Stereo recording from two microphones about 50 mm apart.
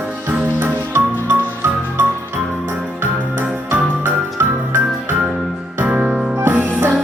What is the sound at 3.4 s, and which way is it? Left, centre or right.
Music, right.